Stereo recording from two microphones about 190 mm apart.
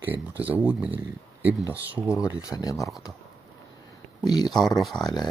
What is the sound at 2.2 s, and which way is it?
Speech, 20° left (ahead or behind).